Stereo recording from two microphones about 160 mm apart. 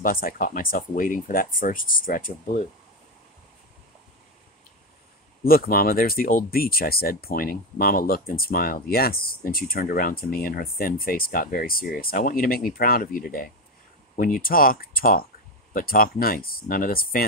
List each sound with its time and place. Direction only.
0.0 s speech: 60° left (ahead or behind)
5.4 s speech: 65° left (ahead or behind)